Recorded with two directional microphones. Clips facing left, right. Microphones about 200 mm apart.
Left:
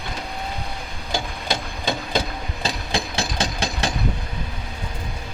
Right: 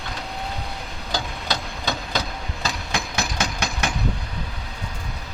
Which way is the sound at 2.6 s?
30° left (ahead or behind).